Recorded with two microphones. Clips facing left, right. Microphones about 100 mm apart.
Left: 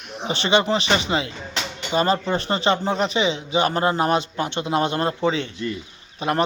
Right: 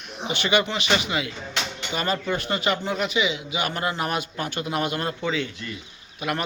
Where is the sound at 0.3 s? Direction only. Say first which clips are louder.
Left 4 dB; 30° left (ahead or behind).